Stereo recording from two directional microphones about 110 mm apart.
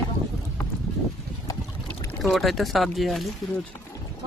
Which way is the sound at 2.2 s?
Centre (ahead or behind).